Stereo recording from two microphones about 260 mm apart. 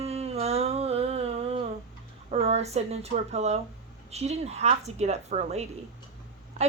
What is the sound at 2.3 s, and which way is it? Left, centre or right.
A woman's voice, right.